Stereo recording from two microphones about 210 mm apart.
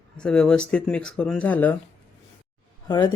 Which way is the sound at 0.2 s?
5° left (ahead or behind).